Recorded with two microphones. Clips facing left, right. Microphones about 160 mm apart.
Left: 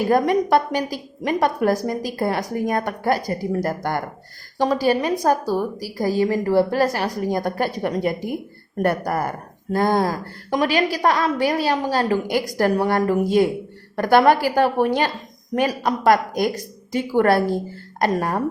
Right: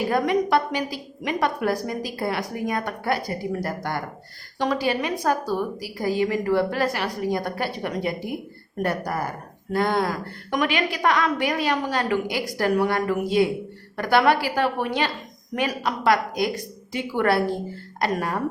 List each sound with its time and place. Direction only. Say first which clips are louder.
0.1 s a woman's voice: left 4 dB; 40° left (ahead or behind)
9.7 s a woman's voice: left 3 dB; 40° left (ahead or behind)